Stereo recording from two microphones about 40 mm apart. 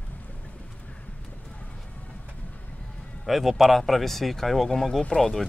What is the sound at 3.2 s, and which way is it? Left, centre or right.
Speech, centre.